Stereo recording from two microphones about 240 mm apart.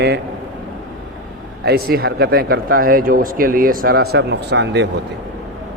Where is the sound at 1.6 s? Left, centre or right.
Right.